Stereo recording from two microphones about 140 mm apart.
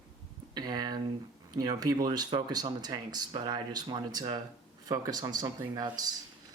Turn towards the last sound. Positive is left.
turn(degrees=-25)  # may be behind; listen again after turning